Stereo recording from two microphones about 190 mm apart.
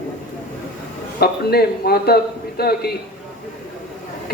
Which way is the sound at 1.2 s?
55° left (ahead or behind).